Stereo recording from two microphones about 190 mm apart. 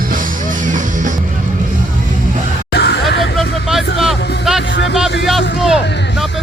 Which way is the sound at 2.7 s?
65° left (ahead or behind).